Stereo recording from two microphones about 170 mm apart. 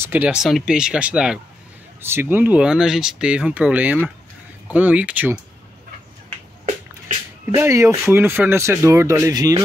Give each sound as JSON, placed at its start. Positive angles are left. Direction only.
{"t": 0.0, "sound": "speech", "side_deg": -10}
{"t": 7.5, "sound": "speech", "side_deg": -15}